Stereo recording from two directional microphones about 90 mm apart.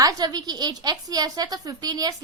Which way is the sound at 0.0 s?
45° right (ahead or behind).